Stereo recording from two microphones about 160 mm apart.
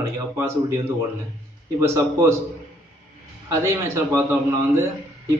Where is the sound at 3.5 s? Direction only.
15° right (ahead or behind).